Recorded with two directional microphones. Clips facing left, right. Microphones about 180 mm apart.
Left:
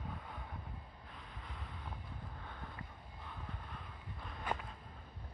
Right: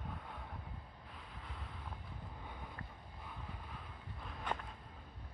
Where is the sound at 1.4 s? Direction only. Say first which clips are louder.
Even; centre (ahead or behind).